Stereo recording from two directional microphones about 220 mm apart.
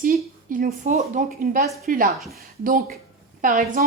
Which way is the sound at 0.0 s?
40° right (ahead or behind).